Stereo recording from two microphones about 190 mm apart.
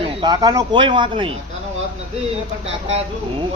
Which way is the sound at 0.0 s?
25° right (ahead or behind).